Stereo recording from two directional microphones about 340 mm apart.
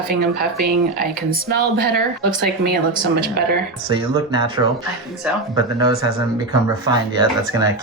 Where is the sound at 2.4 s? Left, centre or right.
Right.